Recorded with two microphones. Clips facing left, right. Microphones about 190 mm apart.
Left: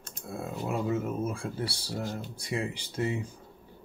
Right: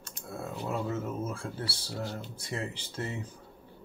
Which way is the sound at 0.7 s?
10° left (ahead or behind).